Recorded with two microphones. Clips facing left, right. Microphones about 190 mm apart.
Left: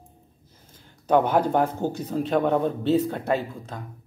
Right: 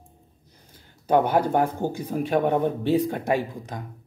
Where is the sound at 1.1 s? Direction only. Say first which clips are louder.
Even; 10° right (ahead or behind).